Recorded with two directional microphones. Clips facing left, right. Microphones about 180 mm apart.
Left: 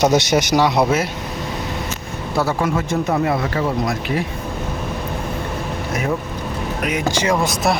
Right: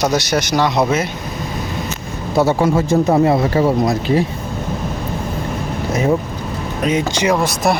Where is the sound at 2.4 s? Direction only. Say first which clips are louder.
Right 5 dB; 25° right (ahead or behind).